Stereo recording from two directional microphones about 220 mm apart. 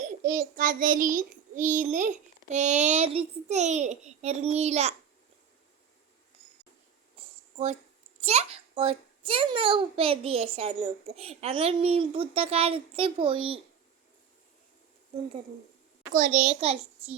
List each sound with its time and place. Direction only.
0.0 s child singing: 35° right (ahead or behind)
8.2 s a child's voice: 30° right (ahead or behind)
16.5 s a child's voice: 30° right (ahead or behind)